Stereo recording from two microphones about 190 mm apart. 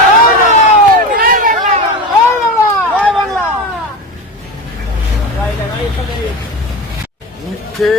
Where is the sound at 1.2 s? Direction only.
45° right (ahead or behind).